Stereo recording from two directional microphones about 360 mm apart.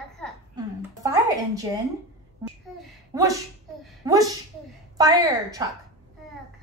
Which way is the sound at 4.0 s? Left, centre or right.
Centre.